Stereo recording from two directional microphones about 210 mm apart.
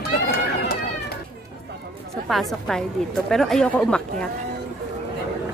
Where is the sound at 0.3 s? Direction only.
50° left (ahead or behind).